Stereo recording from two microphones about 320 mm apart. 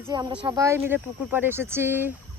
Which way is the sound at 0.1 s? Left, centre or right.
Centre.